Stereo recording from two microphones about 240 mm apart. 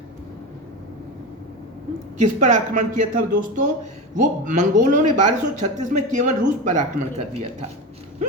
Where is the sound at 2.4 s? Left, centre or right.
Right.